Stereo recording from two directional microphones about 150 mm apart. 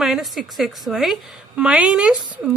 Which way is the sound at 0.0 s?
Centre (ahead or behind).